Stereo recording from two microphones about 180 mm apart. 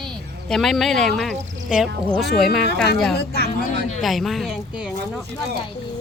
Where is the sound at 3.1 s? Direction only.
60° left (ahead or behind).